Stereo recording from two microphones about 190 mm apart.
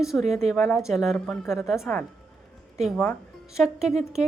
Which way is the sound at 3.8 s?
35° right (ahead or behind).